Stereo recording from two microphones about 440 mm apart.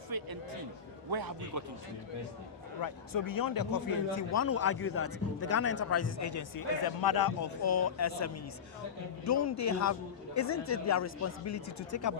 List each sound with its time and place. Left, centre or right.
0.1 s a man's voice: right
2.8 s a man's voice: left
4.1 s a man's voice: left